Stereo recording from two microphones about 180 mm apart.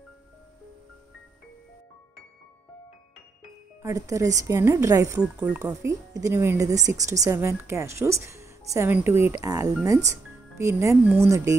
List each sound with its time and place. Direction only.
3.8 s speech: 15° right (ahead or behind)
5.2 s speech: 5° right (ahead or behind)
5.6 s speech: 15° right (ahead or behind)